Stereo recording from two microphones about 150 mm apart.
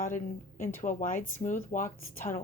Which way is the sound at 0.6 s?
60° left (ahead or behind).